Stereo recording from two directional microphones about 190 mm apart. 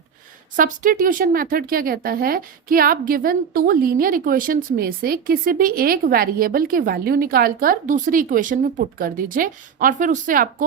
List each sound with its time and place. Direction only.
0.5 s speech: 45° right (ahead or behind)